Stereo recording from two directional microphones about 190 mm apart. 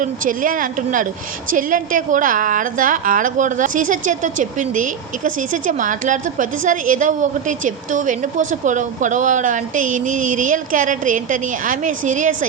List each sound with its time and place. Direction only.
0.0 s a woman's voice: 45° right (ahead or behind)